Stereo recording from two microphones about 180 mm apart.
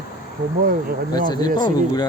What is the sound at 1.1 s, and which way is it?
Speech, 25° left (ahead or behind).